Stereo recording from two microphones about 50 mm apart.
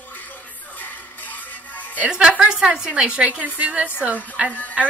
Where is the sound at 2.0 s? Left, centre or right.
Centre.